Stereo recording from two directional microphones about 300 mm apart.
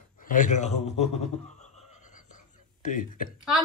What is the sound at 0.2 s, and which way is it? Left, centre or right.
Speech, left.